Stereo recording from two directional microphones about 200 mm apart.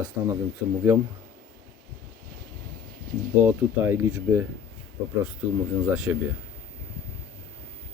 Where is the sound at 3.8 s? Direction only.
10° right (ahead or behind).